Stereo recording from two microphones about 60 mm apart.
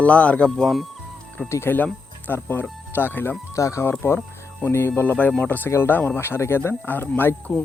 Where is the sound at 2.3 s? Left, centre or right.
Left.